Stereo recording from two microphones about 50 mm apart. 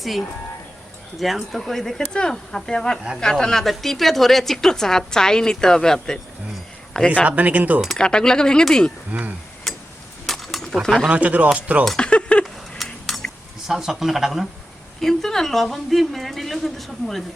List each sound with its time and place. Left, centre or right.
1.2 s a woman's voice: centre
7.3 s speech: right
7.9 s a woman's voice: centre
9.1 s speech: right
9.7 s a sound: centre
10.8 s a woman's voice: centre
11.1 s speech: right
11.9 s a sound: left
12.7 s a sound: centre
13.7 s a woman's voice: centre
15.0 s a woman's voice: centre